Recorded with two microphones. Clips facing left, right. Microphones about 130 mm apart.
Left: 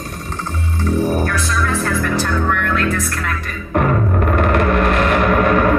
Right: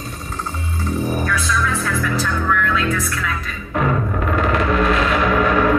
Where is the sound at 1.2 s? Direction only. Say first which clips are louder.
Left 1 dB; 55° left (ahead or behind).